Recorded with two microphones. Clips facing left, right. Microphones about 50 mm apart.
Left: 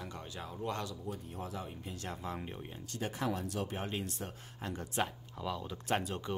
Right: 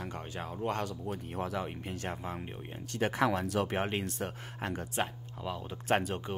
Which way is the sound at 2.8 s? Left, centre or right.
Right.